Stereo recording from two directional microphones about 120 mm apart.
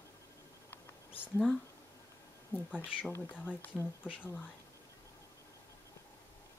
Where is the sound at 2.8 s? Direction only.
15° left (ahead or behind).